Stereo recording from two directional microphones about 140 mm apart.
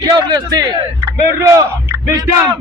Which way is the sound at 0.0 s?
30° right (ahead or behind).